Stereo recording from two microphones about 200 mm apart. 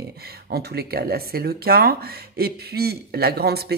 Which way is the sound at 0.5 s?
50° right (ahead or behind).